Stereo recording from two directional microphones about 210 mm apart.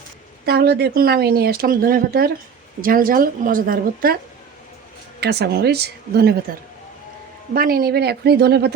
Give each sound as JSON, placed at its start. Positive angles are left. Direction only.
{"t": 0.4, "sound": "speech", "side_deg": -50}
{"t": 5.2, "sound": "speech", "side_deg": -50}
{"t": 7.5, "sound": "speech", "side_deg": -45}